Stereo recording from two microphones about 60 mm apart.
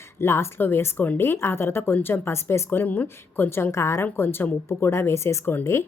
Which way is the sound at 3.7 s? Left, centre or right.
Left.